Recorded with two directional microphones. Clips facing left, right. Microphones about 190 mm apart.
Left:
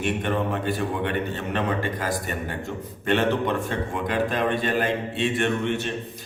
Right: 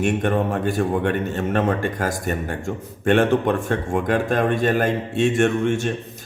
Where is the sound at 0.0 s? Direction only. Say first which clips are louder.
Right 5 dB; 45° right (ahead or behind).